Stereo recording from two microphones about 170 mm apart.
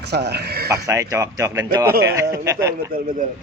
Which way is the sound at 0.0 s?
80° right.